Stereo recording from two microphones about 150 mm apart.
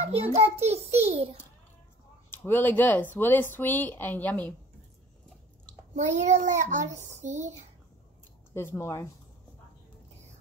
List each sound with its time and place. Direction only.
0.0 s child singing: 45° right (ahead or behind)
2.3 s speech: 15° left (ahead or behind)
5.9 s child singing: 50° right (ahead or behind)
8.5 s speech: 15° left (ahead or behind)